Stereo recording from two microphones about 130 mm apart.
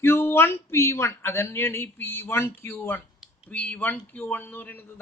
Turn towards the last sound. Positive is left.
turn(degrees=15)  # may be behind; listen again after turning